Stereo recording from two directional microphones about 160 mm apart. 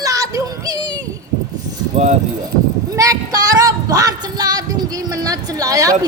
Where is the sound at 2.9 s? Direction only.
20° right (ahead or behind).